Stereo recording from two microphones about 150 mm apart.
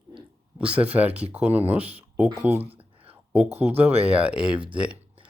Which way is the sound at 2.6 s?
40° right (ahead or behind).